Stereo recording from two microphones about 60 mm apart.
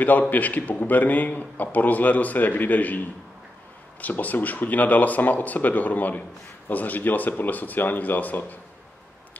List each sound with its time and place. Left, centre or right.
0.3 s speech: left
4.0 s speech: left